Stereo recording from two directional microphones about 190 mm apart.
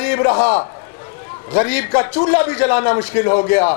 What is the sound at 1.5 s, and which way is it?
A man's voice, 15° left (ahead or behind).